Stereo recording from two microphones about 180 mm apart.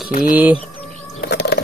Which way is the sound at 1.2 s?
65° left (ahead or behind).